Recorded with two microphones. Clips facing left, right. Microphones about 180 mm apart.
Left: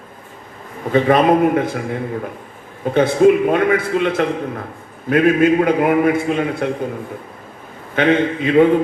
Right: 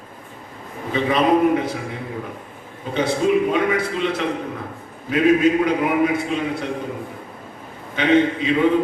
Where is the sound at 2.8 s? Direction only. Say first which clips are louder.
Left 8 dB; 55° left (ahead or behind).